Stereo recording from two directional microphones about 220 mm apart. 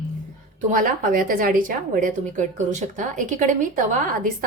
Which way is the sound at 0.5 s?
35° right (ahead or behind).